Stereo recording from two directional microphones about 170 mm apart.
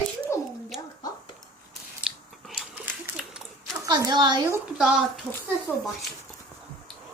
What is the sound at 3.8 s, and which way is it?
Speech, 20° right (ahead or behind).